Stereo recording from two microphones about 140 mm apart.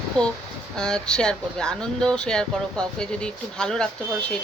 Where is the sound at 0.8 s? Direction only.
5° left (ahead or behind).